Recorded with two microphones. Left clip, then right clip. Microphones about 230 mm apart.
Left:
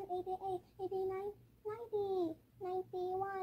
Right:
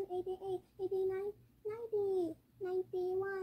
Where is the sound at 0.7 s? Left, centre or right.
Centre.